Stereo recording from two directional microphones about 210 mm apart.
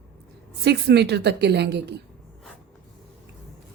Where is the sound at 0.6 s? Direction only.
50° right (ahead or behind).